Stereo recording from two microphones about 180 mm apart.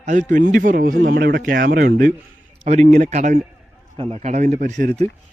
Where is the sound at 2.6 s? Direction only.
40° right (ahead or behind).